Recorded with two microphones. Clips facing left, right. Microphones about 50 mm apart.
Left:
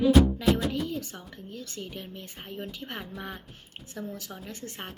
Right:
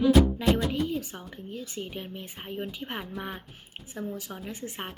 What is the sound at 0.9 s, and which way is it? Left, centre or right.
Speech, centre.